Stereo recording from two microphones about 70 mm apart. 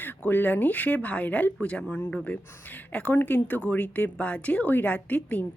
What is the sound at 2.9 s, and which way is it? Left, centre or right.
Speech, left.